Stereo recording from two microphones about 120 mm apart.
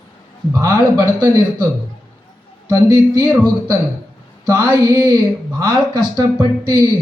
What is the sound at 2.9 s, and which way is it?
Speech, 35° right (ahead or behind).